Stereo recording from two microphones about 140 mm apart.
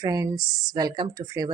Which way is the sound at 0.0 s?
25° right (ahead or behind).